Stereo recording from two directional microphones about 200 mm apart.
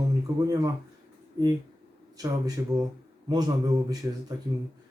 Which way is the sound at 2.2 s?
20° right (ahead or behind).